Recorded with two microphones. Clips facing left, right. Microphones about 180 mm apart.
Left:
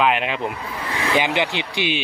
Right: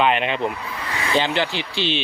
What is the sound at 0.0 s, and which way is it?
Speech, 5° left (ahead or behind).